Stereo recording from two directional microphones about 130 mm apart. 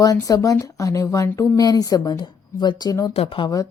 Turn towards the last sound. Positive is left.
turn(degrees=40)  # may be behind; listen again after turning